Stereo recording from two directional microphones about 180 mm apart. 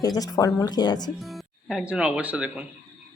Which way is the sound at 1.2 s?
Centre (ahead or behind).